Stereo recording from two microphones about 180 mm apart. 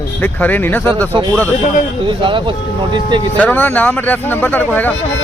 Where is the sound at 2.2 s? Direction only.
25° right (ahead or behind).